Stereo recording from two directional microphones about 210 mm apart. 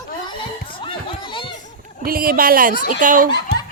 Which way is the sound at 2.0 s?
45° right (ahead or behind).